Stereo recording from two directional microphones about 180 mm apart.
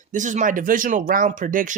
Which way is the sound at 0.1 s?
45° right (ahead or behind).